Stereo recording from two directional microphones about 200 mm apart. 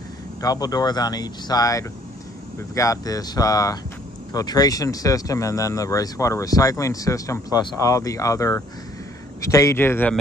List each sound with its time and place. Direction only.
0.4 s speech: 20° left (ahead or behind)